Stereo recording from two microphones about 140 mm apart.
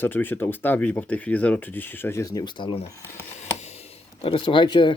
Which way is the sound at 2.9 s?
20° left (ahead or behind).